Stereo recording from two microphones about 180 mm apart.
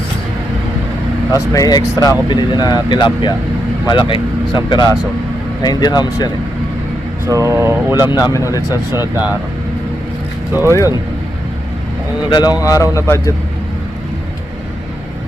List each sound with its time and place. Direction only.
1.5 s speech: 20° left (ahead or behind)
7.3 s speech: 15° right (ahead or behind)
8.1 s speech: 20° left (ahead or behind)
8.9 s speech: 10° right (ahead or behind)
12.3 s a man's voice: 25° left (ahead or behind)